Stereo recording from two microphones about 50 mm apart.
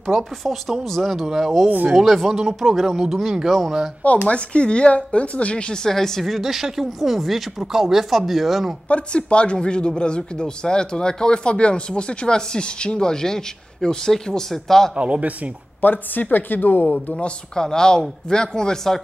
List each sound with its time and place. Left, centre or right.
0.0 s speech: centre
4.3 s speech: left
5.9 s speech: centre
8.8 s speech: left
15.0 s speech: right
15.8 s a woman's voice: left
17.6 s speech: centre